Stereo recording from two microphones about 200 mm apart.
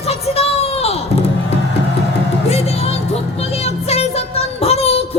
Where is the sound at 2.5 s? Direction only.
30° left (ahead or behind).